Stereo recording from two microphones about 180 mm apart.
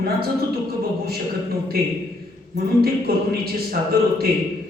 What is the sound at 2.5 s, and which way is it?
A man's voice, 60° right (ahead or behind).